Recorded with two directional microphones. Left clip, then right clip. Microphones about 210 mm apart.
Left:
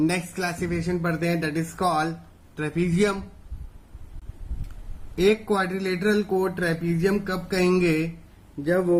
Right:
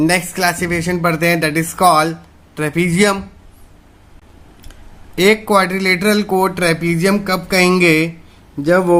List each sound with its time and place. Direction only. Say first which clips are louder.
0.0 s speech: right 11 dB; 45° right (ahead or behind)
5.1 s speech: right 10 dB; 45° right (ahead or behind)
8.6 s speech: right 10 dB; 55° right (ahead or behind)